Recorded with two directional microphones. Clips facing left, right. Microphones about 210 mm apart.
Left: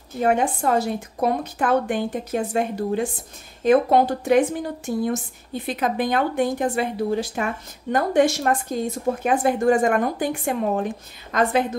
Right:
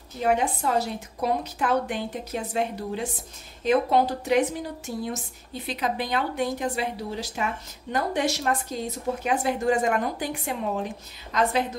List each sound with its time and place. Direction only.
0.2 s speech: 50° left (ahead or behind)